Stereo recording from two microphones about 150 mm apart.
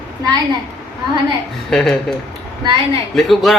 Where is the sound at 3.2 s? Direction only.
Centre (ahead or behind).